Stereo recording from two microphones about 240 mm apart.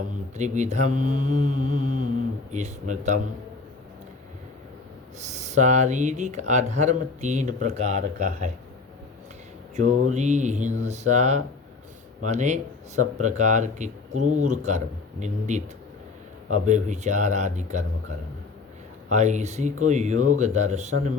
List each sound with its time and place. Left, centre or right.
0.3 s mantra: right
2.5 s speech: right
5.2 s speech: right
9.7 s speech: right
19.1 s speech: right